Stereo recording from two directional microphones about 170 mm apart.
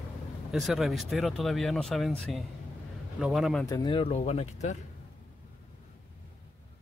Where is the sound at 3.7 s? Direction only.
30° left (ahead or behind).